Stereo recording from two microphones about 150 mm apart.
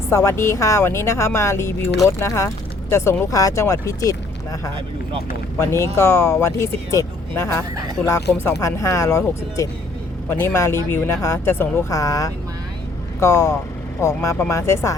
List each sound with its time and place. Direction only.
0.1 s speech: 20° left (ahead or behind)
5.5 s speech: 15° left (ahead or behind)